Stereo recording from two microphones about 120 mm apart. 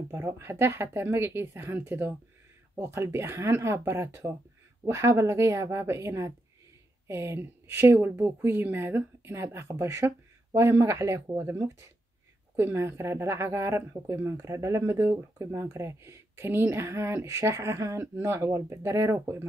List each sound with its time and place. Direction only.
0.1 s speech: 20° right (ahead or behind)